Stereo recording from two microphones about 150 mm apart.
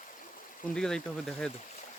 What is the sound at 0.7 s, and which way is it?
Speech, 5° left (ahead or behind).